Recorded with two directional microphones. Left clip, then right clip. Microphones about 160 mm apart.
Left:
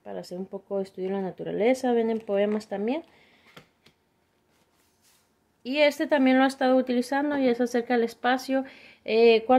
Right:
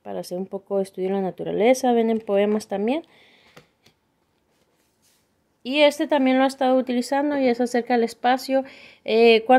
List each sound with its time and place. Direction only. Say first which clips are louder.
0.0 s speech: right 6 dB; 55° right (ahead or behind)
5.6 s speech: right 4 dB; 40° right (ahead or behind)